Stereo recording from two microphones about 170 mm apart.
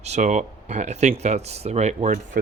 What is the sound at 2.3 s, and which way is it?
Speech, 60° right (ahead or behind).